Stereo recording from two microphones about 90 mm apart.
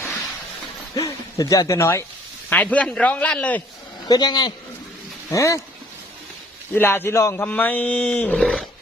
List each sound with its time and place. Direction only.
0.9 s speech: 40° left (ahead or behind)
2.5 s speech: 15° left (ahead or behind)
4.1 s a man's voice: 50° left (ahead or behind)
5.3 s speech: 35° left (ahead or behind)
6.7 s a man's voice: 25° left (ahead or behind)
7.4 s speech: 15° left (ahead or behind)